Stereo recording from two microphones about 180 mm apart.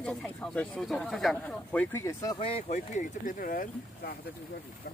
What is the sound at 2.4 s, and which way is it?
Speech, 35° left (ahead or behind).